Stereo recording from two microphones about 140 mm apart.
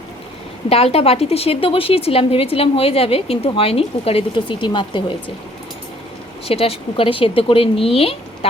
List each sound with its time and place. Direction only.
0.7 s a woman's voice: 45° left (ahead or behind)
6.5 s speech: 45° left (ahead or behind)